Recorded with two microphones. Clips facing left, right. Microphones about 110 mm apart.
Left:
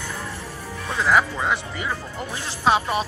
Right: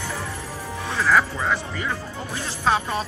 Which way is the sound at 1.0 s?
15° left (ahead or behind).